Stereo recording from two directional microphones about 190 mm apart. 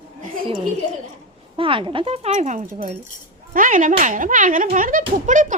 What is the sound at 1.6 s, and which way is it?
Speech, 25° right (ahead or behind).